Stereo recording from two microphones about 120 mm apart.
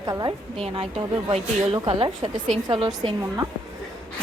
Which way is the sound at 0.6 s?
45° right (ahead or behind).